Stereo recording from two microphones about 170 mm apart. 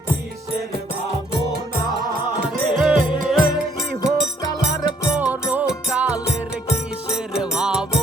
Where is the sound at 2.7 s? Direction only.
5° right (ahead or behind).